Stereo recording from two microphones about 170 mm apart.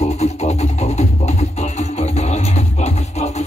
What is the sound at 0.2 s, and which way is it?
Music, 40° left (ahead or behind).